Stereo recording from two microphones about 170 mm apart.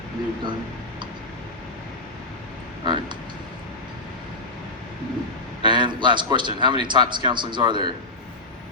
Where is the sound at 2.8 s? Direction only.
25° right (ahead or behind).